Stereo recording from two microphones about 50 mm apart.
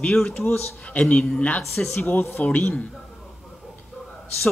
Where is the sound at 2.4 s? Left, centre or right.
Left.